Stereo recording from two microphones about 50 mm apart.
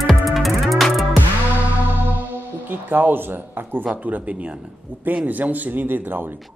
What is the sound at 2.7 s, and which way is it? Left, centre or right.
Speech, right.